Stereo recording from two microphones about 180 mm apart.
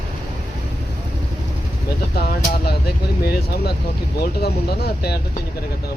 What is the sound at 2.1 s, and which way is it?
Vehicle, 60° left (ahead or behind).